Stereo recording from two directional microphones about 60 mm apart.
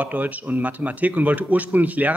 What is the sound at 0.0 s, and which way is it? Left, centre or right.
Speech, right.